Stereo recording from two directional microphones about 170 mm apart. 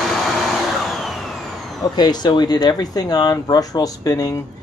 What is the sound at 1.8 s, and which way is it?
Speech, 25° left (ahead or behind).